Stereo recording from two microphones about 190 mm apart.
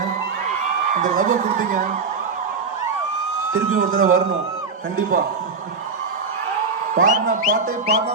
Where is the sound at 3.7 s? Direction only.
45° right (ahead or behind).